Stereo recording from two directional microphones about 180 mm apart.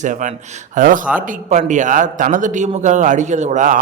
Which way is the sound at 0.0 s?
45° right (ahead or behind).